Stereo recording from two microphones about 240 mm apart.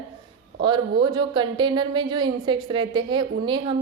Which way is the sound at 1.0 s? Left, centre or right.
Centre.